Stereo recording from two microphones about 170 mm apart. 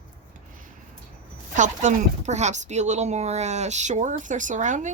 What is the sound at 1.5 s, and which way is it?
Speech, 45° right (ahead or behind).